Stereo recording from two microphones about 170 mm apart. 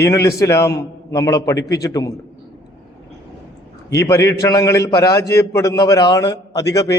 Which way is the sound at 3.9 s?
15° left (ahead or behind).